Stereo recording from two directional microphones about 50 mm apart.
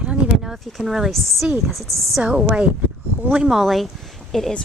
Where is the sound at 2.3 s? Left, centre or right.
Right.